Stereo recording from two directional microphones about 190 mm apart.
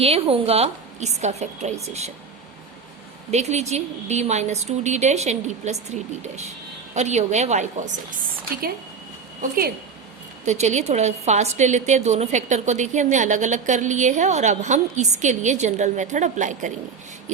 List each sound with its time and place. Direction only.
0.0 s a woman's voice: 30° right (ahead or behind)
3.3 s a woman's voice: 35° right (ahead or behind)
10.4 s a woman's voice: 35° right (ahead or behind)